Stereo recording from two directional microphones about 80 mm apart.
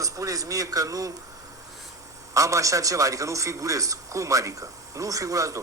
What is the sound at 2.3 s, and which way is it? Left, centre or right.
A man's voice, right.